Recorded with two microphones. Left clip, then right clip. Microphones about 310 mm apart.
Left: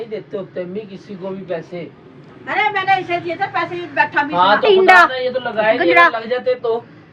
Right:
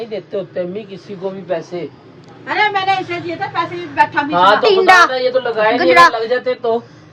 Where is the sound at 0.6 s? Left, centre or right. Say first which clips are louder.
Right 4 dB; right.